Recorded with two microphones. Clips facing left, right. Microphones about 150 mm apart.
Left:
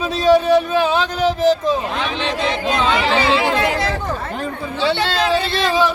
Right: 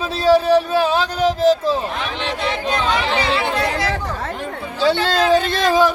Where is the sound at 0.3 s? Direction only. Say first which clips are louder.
Even; 35° right (ahead or behind).